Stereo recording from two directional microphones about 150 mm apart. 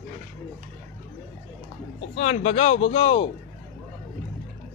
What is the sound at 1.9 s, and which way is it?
A man's voice, 45° left (ahead or behind).